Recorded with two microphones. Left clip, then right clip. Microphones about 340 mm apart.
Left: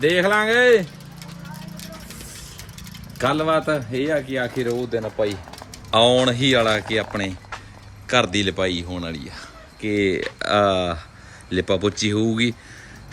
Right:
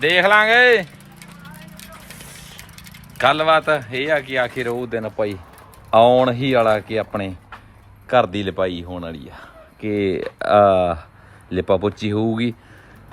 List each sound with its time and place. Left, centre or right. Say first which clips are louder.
0.0 s speech: right 4 dB; centre
3.2 s speech: right 5 dB; centre
4.5 s speech: even; right
5.9 s a man's voice: right 3 dB; centre